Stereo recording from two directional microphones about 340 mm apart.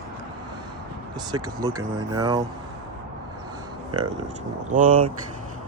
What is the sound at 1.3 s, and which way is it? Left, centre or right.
Speech, centre.